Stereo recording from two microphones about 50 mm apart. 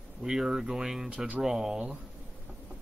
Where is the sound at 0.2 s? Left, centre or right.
Centre.